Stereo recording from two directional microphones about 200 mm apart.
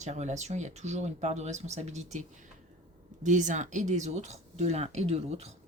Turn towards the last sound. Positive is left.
turn(degrees=-30)  # may be behind; listen again after turning